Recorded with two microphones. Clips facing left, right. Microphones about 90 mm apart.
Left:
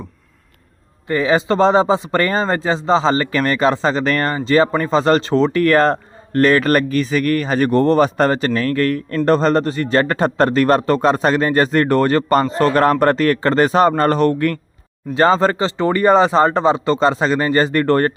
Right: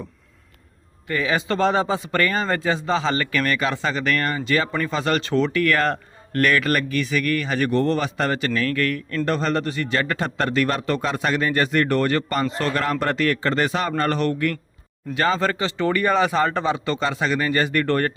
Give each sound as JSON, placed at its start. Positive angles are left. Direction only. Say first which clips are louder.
{"t": 1.0, "sound": "speech", "louder": "left 7 dB", "side_deg": 30}